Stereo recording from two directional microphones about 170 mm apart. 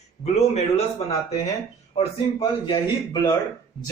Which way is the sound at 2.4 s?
30° left (ahead or behind).